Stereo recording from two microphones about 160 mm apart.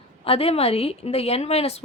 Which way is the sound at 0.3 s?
35° left (ahead or behind).